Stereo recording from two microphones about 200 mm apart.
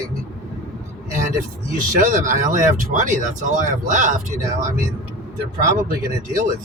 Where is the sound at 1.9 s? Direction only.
40° right (ahead or behind).